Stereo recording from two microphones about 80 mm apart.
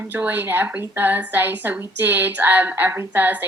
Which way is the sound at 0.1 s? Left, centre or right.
Right.